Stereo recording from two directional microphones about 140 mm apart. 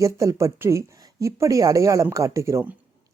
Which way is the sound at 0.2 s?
20° right (ahead or behind).